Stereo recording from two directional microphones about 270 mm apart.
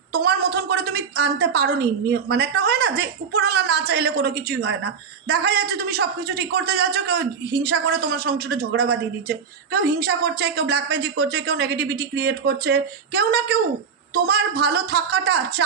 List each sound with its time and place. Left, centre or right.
0.1 s a man's voice: right